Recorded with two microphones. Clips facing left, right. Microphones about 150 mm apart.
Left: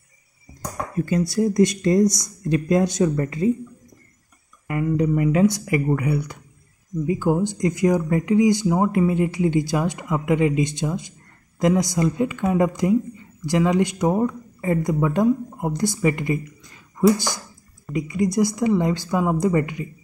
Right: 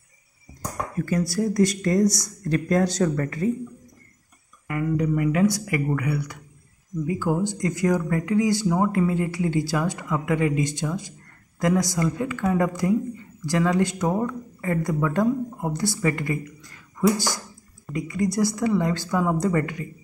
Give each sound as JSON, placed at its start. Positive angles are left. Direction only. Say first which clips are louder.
{"t": 0.9, "sound": "speech", "louder": "left 3 dB", "side_deg": 20}
{"t": 4.6, "sound": "speech", "louder": "left 3 dB", "side_deg": 25}